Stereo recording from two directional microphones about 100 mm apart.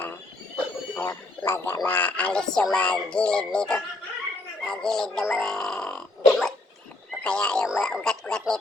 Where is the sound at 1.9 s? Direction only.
15° left (ahead or behind).